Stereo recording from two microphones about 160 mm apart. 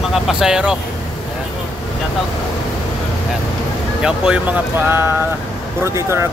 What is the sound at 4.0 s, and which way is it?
Speech, 10° right (ahead or behind).